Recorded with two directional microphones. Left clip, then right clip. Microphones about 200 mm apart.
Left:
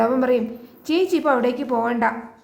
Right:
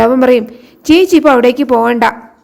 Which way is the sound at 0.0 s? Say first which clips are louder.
Right 10 dB; 40° right (ahead or behind).